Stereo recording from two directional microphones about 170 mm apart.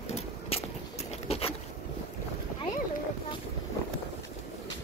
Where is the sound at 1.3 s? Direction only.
35° left (ahead or behind).